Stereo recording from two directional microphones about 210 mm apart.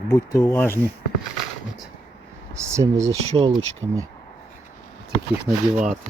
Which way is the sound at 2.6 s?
15° right (ahead or behind).